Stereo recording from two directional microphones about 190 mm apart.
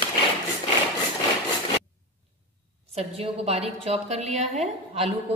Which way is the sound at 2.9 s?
30° right (ahead or behind).